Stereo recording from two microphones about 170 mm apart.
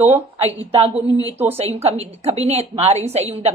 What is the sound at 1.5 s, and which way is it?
A woman's voice, 35° right (ahead or behind).